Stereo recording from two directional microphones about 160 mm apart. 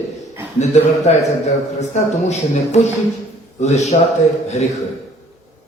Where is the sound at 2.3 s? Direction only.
45° left (ahead or behind).